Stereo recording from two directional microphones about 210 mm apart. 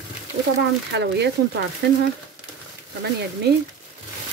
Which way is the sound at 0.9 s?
55° right (ahead or behind).